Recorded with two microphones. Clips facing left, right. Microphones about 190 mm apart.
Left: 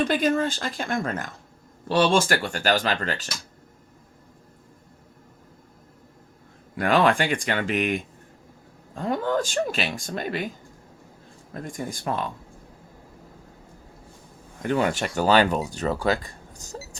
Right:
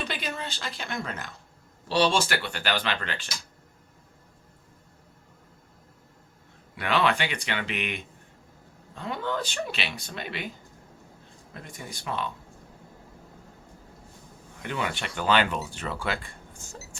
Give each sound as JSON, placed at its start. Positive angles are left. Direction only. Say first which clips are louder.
{"t": 0.0, "sound": "speech", "louder": "left 12 dB", "side_deg": 45}
{"t": 6.7, "sound": "speech", "louder": "left 5 dB", "side_deg": 45}
{"t": 11.5, "sound": "speech", "louder": "left 9 dB", "side_deg": 45}
{"t": 14.6, "sound": "speech", "louder": "left 8 dB", "side_deg": 45}